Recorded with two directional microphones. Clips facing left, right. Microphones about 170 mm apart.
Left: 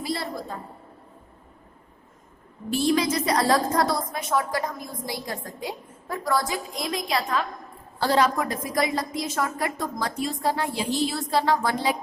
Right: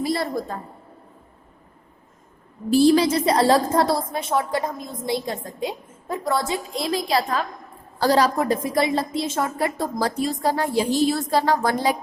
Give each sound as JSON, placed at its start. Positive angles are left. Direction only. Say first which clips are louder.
{"t": 0.0, "sound": "a woman's voice", "louder": "right 6 dB", "side_deg": -50}
{"t": 2.7, "sound": "a woman's voice", "louder": "right 7 dB", "side_deg": -35}